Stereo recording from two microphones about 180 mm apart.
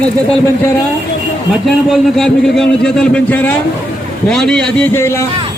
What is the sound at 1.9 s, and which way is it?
A man's voice, centre (ahead or behind).